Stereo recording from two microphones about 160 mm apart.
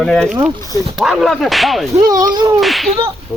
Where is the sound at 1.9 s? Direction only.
25° right (ahead or behind).